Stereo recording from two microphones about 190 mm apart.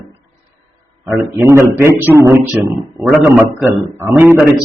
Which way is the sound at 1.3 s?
15° right (ahead or behind).